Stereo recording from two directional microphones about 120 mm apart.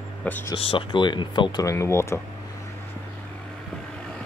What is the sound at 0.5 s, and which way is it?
Speech, 45° left (ahead or behind).